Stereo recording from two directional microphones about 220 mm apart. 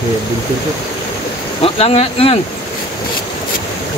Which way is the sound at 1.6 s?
25° left (ahead or behind).